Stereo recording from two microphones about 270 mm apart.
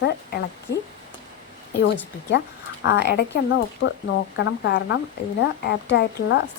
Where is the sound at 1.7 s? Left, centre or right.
Left.